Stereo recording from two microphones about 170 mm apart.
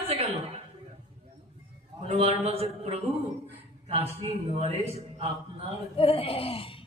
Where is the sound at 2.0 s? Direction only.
40° right (ahead or behind).